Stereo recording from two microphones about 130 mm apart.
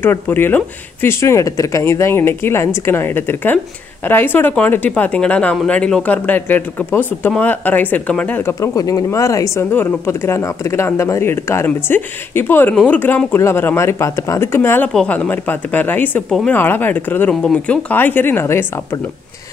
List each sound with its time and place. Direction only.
0.0 s speech: 15° left (ahead or behind)